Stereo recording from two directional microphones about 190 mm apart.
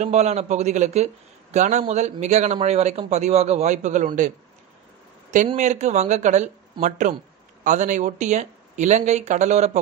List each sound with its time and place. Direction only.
0.0 s a man's voice: 35° right (ahead or behind)
5.5 s a man's voice: 40° right (ahead or behind)